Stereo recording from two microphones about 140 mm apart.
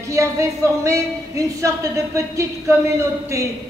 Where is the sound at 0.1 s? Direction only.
20° right (ahead or behind).